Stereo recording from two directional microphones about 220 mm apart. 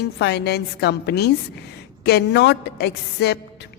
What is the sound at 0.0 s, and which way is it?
A woman's voice, 50° left (ahead or behind).